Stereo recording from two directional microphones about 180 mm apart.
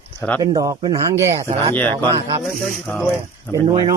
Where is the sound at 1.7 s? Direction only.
10° left (ahead or behind).